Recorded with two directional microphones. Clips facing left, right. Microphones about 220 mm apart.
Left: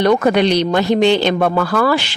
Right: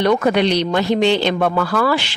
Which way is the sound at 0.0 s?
45° left (ahead or behind).